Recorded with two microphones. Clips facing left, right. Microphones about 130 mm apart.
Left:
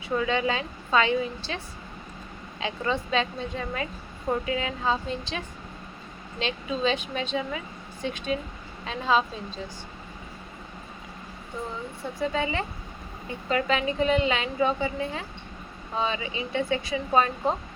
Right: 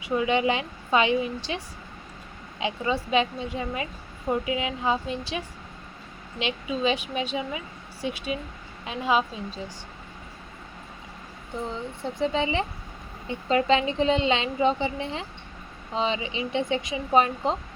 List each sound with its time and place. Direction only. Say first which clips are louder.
0.0 s a woman's voice: right 2 dB; 15° right (ahead or behind)
6.4 s a woman's voice: right 1 dB; 10° right (ahead or behind)
12.2 s a woman's voice: right 2 dB; 25° right (ahead or behind)